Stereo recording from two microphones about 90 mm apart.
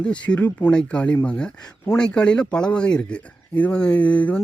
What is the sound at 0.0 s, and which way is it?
Speech, 10° left (ahead or behind).